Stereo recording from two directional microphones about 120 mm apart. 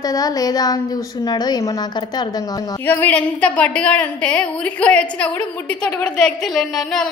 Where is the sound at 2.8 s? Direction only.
15° left (ahead or behind).